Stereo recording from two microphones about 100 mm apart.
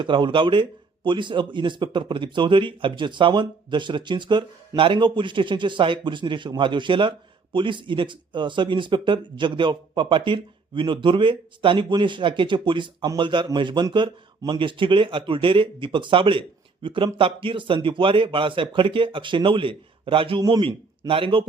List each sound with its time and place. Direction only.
0.0 s a man's voice: 55° right (ahead or behind)